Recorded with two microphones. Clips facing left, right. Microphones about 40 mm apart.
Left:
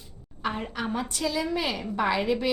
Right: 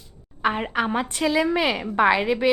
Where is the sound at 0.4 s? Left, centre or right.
Right.